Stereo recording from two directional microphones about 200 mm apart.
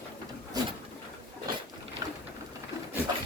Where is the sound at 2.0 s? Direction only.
20° right (ahead or behind).